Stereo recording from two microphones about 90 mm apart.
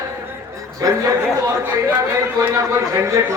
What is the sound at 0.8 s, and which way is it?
Speech, 40° right (ahead or behind).